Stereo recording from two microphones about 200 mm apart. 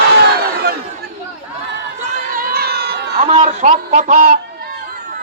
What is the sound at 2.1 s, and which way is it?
Crowd, 45° right (ahead or behind).